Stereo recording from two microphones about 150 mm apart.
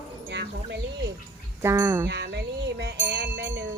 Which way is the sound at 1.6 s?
15° right (ahead or behind).